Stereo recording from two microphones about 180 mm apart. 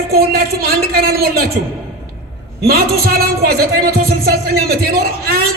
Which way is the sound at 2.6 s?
60° right (ahead or behind).